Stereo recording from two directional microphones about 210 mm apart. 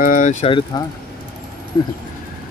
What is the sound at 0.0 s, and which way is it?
Speech, 40° left (ahead or behind).